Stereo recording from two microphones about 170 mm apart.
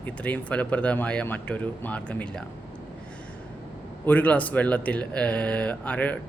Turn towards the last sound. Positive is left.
turn(degrees=10)  # may be behind; listen again after turning